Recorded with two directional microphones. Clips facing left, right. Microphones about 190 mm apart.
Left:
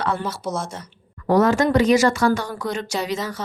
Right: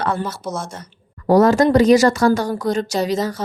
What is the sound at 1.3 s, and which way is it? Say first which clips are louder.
Speech: right 4 dB; 40° right (ahead or behind).